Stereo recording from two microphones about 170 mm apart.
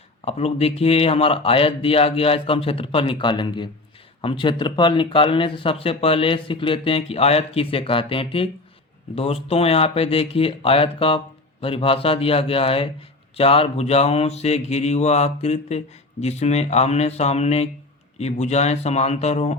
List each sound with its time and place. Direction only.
0.3 s speech: 35° left (ahead or behind)